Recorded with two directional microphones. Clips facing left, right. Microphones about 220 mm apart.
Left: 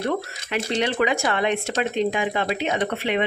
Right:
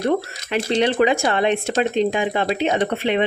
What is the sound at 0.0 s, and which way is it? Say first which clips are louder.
Speech: right 5 dB; 30° right (ahead or behind).